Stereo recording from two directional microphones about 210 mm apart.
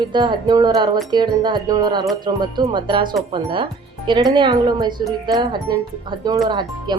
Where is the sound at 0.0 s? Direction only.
20° right (ahead or behind).